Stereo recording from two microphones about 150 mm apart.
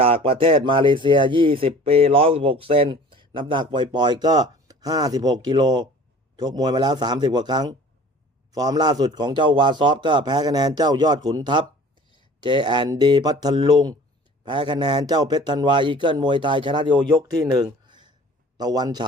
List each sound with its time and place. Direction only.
0.0 s a man's voice: 40° right (ahead or behind)